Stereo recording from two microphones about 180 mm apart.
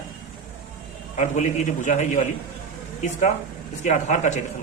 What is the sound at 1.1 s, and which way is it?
A man's voice, 45° left (ahead or behind).